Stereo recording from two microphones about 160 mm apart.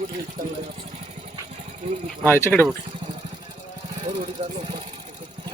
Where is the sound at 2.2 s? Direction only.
15° left (ahead or behind).